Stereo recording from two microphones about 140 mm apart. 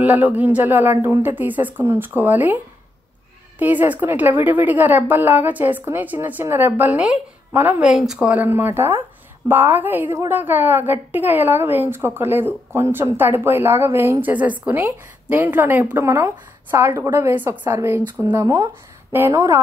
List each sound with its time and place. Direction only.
0.0 s a woman's voice: 10° right (ahead or behind)